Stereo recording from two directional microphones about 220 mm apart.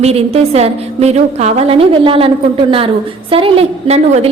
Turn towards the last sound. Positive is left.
turn(degrees=-30)  # may be behind; listen again after turning